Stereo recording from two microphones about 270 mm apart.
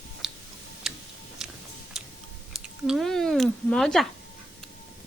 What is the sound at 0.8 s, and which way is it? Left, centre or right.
Tick-tock, centre.